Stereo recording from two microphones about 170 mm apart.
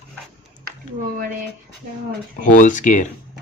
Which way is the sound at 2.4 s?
50° left (ahead or behind).